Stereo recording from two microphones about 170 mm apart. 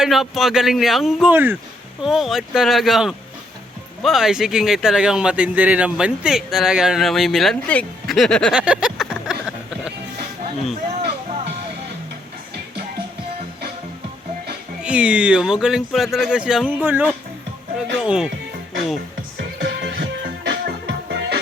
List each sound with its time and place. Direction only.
0.0 s speech: centre (ahead or behind)
14.8 s speech: 5° right (ahead or behind)
19.4 s music: 85° right